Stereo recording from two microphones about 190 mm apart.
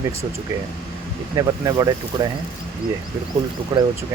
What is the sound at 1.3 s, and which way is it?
Speech, 20° right (ahead or behind).